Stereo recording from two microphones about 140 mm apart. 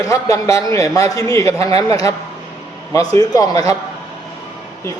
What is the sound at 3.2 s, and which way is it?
Speech, 25° left (ahead or behind).